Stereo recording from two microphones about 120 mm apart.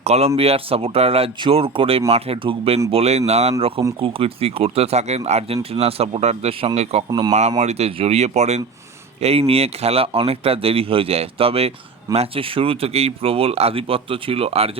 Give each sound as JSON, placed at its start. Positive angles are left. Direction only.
{"t": 0.0, "sound": "speech", "side_deg": -60}
{"t": 2.9, "sound": "speech", "side_deg": -60}
{"t": 3.6, "sound": "speech", "side_deg": -50}
{"t": 7.1, "sound": "speech", "side_deg": -30}
{"t": 7.6, "sound": "speech", "side_deg": -65}
{"t": 9.2, "sound": "speech", "side_deg": -55}